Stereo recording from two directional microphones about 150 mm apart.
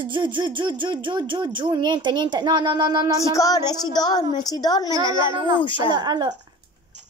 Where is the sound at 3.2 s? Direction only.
20° left (ahead or behind).